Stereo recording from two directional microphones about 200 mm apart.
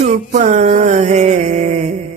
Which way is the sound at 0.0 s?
35° right (ahead or behind).